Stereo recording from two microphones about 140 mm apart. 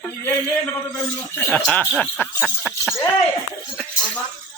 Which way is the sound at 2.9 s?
20° left (ahead or behind).